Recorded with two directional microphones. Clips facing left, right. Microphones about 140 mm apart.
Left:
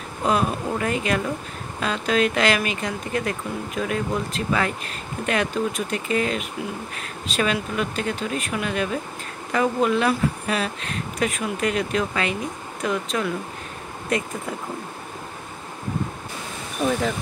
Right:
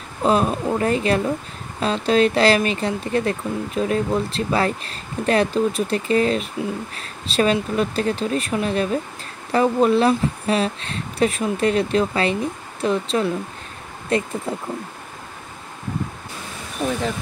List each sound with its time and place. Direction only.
0.2 s speech: 30° right (ahead or behind)